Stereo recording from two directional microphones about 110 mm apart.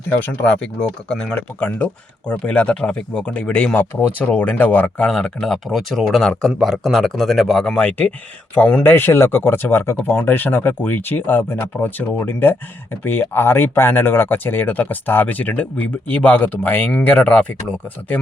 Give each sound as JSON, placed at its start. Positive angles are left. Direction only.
{"t": 0.2, "sound": "speech", "side_deg": 10}